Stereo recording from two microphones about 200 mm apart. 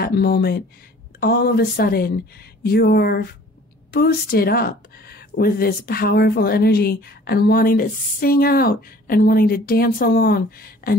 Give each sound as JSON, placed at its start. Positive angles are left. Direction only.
{"t": 0.0, "sound": "speech", "side_deg": 50}